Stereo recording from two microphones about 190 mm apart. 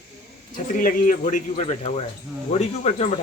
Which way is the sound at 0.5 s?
40° left (ahead or behind).